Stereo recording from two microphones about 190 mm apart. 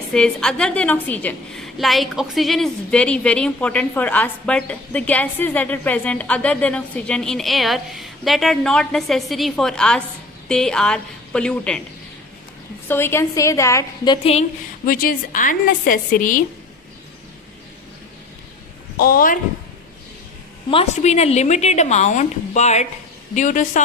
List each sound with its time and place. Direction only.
0.1 s a woman's voice: 5° left (ahead or behind)
12.9 s a woman's voice: 10° left (ahead or behind); by 14.4 s 25° left (ahead or behind)
14.8 s a woman's voice: 50° left (ahead or behind)
18.9 s a woman's voice: 50° left (ahead or behind)
20.7 s a woman's voice: 30° left (ahead or behind)